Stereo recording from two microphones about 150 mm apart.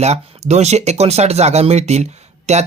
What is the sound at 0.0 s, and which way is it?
Speech, 45° right (ahead or behind).